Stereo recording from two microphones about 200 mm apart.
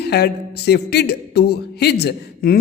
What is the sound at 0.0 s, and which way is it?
Speech, 55° left (ahead or behind).